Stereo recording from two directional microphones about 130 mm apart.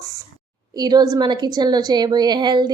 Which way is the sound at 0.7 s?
30° right (ahead or behind).